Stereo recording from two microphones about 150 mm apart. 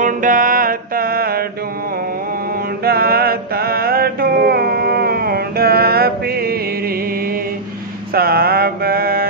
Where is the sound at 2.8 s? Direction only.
90° right.